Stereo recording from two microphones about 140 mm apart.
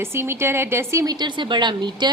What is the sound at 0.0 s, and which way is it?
A woman's voice, 15° right (ahead or behind).